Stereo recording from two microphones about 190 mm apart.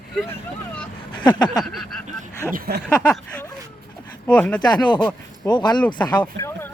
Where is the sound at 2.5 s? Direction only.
55° right (ahead or behind).